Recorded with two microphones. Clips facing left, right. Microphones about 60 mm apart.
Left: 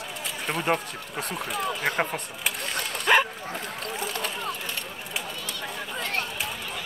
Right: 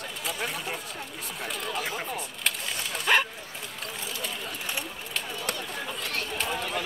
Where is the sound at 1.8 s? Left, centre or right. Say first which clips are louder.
Left 7 dB; left.